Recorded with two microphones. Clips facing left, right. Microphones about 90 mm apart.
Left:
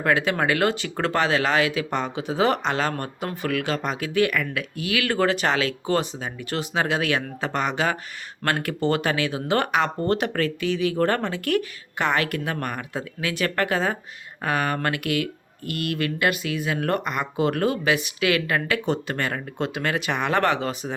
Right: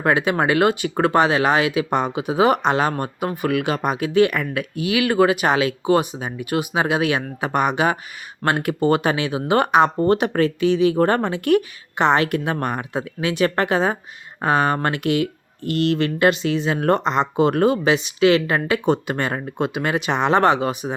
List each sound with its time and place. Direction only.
0.0 s speech: 20° right (ahead or behind)